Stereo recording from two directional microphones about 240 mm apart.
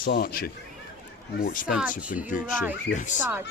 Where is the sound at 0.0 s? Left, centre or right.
Left.